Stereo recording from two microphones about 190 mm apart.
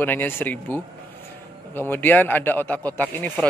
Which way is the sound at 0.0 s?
10° left (ahead or behind).